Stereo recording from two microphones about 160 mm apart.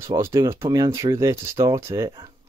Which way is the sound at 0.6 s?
30° right (ahead or behind).